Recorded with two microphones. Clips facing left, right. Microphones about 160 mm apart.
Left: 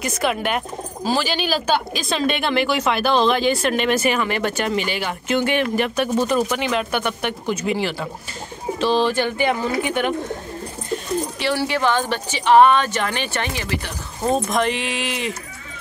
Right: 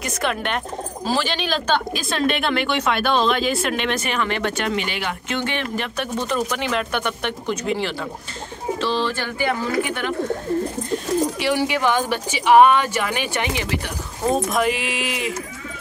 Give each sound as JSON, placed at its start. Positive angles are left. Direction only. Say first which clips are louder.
{"t": 0.0, "sound": "a woman's voice", "louder": "left 2 dB", "side_deg": 5}
{"t": 11.3, "sound": "speech", "louder": "right 1 dB", "side_deg": -15}
{"t": 14.5, "sound": "a woman's voice", "louder": "even", "side_deg": -5}